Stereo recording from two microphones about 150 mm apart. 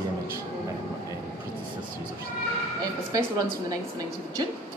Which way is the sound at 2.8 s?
25° right (ahead or behind).